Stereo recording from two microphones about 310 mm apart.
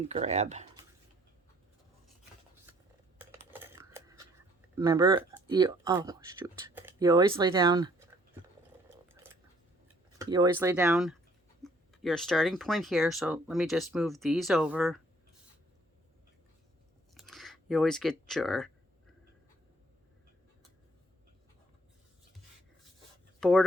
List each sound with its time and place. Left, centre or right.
0.1 s speech: right
3.2 s a sound: centre
4.7 s speech: centre
9.2 s a sound: centre
10.2 s speech: centre
17.2 s speech: centre
23.4 s speech: centre